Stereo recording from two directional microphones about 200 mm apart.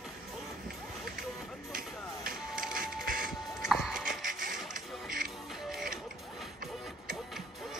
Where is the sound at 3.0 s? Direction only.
45° right (ahead or behind).